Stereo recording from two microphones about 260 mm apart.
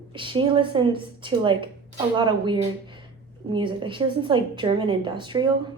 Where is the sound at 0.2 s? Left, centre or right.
Centre.